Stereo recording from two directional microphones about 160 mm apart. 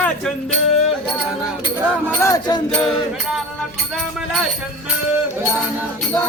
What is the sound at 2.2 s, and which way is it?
Speech, 20° left (ahead or behind).